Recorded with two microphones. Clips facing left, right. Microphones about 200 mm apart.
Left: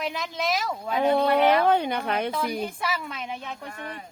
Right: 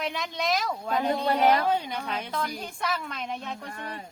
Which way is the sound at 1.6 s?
60° left (ahead or behind).